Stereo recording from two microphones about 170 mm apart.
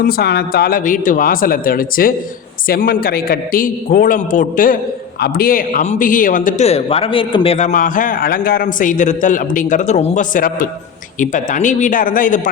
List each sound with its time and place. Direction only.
0.0 s a man's voice: 65° left (ahead or behind)